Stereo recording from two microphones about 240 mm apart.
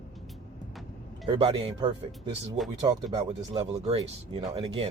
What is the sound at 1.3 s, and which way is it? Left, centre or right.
Speech, centre.